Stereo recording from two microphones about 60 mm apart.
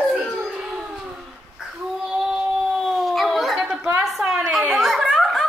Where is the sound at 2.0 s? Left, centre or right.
Centre.